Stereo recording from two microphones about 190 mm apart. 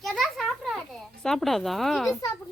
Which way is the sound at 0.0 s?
Centre (ahead or behind).